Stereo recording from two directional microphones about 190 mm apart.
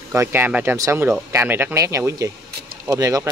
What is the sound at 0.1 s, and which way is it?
Speech, 15° right (ahead or behind).